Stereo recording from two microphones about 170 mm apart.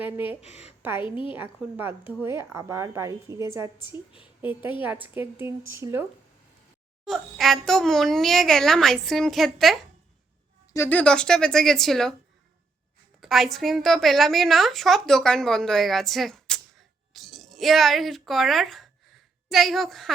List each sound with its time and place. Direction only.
0.0 s a woman's voice: 10° right (ahead or behind)
0.4 s a woman's voice: 40° left (ahead or behind)
0.8 s a woman's voice: 10° right (ahead or behind)
1.0 s a woman's voice: 30° left (ahead or behind)
1.4 s a woman's voice: 10° right (ahead or behind)
7.0 s a child's voice: centre (ahead or behind)
10.7 s a child's voice: 15° left (ahead or behind)
13.2 s a woman's voice: centre (ahead or behind)